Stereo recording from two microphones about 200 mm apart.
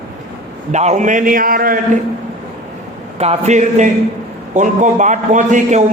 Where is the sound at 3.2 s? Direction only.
35° right (ahead or behind).